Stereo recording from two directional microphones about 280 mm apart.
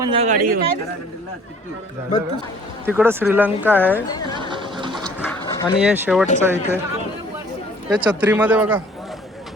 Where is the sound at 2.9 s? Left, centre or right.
Centre.